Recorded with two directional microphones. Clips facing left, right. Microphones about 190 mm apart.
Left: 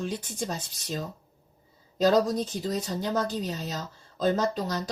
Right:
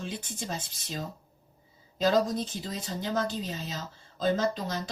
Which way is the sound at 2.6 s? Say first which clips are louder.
Left 5 dB; 40° left (ahead or behind).